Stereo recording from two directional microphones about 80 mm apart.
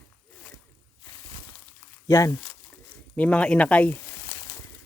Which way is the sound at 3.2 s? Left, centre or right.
Centre.